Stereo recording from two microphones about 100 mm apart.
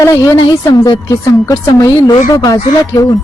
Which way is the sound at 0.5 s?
40° left (ahead or behind).